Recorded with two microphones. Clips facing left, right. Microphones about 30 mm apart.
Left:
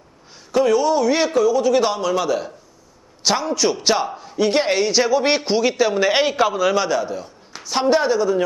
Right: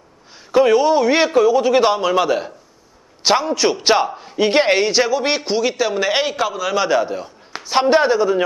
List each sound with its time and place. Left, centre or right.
0.5 s a man's voice: right
5.0 s a man's voice: centre
6.8 s a man's voice: right